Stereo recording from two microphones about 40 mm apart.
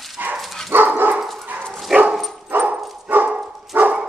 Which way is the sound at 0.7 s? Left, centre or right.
Right.